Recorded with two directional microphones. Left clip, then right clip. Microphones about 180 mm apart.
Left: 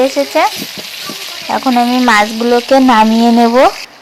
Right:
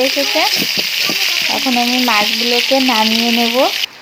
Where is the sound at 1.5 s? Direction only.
30° left (ahead or behind).